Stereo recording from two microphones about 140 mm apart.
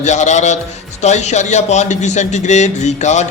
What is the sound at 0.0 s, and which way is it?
A man's voice, 55° left (ahead or behind).